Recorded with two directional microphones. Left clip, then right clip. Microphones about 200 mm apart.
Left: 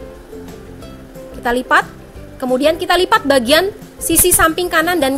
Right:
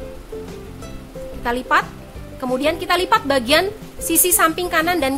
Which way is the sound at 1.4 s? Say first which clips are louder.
Left 4 dB; 20° left (ahead or behind).